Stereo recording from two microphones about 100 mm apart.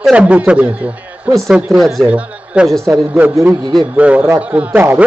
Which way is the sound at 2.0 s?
10° right (ahead or behind).